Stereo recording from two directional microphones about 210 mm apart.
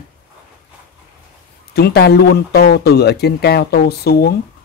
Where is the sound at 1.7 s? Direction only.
50° left (ahead or behind).